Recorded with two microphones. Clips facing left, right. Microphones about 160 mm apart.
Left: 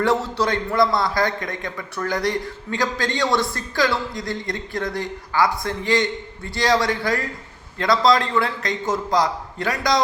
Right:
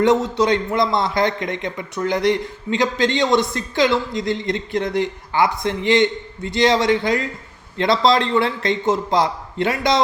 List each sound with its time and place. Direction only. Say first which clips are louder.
0.0 s a man's voice: right 4 dB; 20° right (ahead or behind)